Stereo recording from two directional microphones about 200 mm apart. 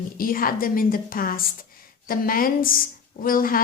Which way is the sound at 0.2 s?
45° left (ahead or behind).